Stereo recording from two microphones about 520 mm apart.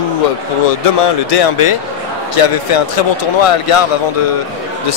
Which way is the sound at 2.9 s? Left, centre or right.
Left.